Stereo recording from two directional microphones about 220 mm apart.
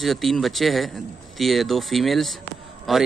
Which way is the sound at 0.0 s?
Centre (ahead or behind).